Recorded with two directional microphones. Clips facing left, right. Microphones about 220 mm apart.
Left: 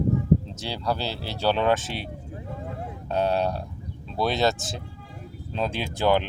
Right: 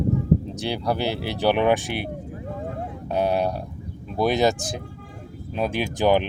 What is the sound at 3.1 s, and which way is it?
Speech, 10° right (ahead or behind).